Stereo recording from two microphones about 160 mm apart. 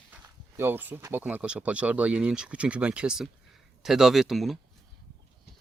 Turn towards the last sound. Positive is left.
turn(degrees=0)  # may be behind; listen again after turning